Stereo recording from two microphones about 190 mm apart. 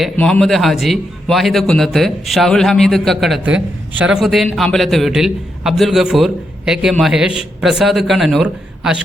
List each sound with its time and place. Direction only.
0.0 s speech: 5° left (ahead or behind)